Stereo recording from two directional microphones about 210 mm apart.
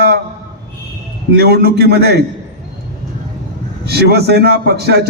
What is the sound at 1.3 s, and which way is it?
Speech, 50° right (ahead or behind).